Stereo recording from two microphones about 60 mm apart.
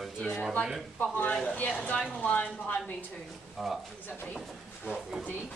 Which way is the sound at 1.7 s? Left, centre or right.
Centre.